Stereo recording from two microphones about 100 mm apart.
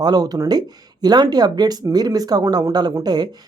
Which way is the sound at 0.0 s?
40° right (ahead or behind).